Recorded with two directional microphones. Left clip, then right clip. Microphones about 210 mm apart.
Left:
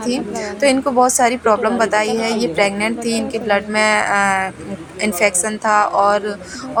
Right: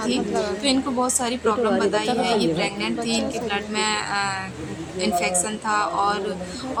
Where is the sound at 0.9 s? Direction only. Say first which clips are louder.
Left 10 dB; 30° left (ahead or behind).